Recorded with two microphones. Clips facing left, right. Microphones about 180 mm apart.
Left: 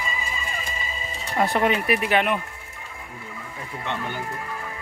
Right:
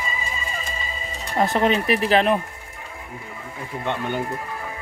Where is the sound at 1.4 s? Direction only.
25° right (ahead or behind).